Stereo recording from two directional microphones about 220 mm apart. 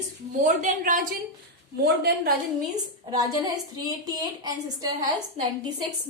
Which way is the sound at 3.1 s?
20° right (ahead or behind).